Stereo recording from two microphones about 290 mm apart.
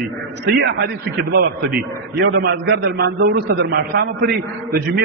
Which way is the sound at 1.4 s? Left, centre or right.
Right.